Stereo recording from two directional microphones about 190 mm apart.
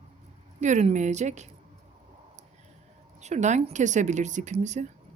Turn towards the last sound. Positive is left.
turn(degrees=-40)  # may be behind; listen again after turning